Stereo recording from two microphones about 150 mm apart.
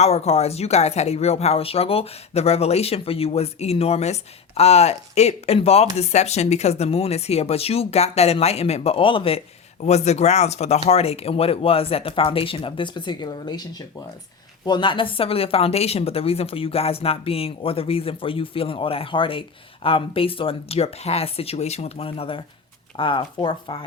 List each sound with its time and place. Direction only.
0.0 s speech: 45° left (ahead or behind)